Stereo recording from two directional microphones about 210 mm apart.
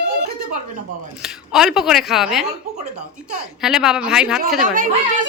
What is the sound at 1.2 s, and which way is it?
Speech, centre (ahead or behind).